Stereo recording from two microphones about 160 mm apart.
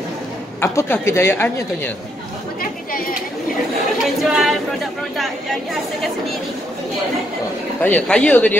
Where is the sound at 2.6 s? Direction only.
65° left (ahead or behind).